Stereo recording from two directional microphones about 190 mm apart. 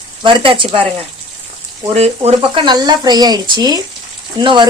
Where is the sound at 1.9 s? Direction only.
35° right (ahead or behind).